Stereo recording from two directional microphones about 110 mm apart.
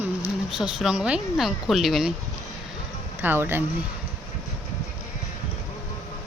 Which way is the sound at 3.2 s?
20° right (ahead or behind).